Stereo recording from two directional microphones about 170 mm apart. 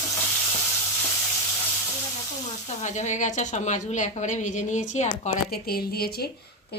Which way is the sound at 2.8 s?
45° left (ahead or behind).